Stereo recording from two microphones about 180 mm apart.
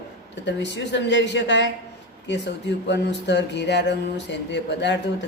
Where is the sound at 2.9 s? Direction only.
75° left (ahead or behind).